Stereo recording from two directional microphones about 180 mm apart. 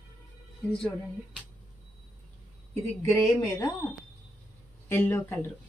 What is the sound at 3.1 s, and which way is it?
Speech, 15° left (ahead or behind).